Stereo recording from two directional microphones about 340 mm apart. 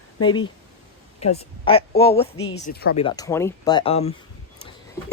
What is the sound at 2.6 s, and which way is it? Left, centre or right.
Speech, left.